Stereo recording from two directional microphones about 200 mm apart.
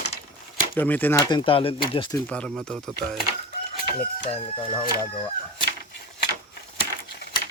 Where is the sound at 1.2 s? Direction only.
25° left (ahead or behind).